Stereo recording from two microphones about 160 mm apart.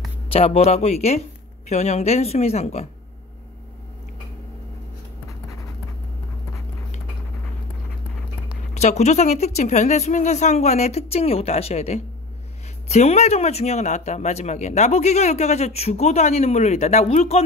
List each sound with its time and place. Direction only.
0.3 s speech: 40° left (ahead or behind)
8.7 s speech: 45° left (ahead or behind)